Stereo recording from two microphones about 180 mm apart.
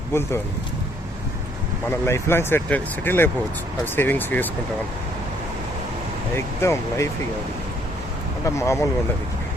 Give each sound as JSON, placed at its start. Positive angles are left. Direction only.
{"t": 0.1, "sound": "speech", "side_deg": 15}
{"t": 1.9, "sound": "speech", "side_deg": 15}
{"t": 6.3, "sound": "speech", "side_deg": 15}
{"t": 8.4, "sound": "speech", "side_deg": 15}